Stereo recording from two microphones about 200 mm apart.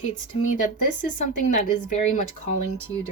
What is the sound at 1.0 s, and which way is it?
Speech, 35° left (ahead or behind).